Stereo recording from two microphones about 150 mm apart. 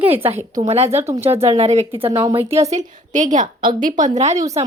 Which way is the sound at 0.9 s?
15° right (ahead or behind).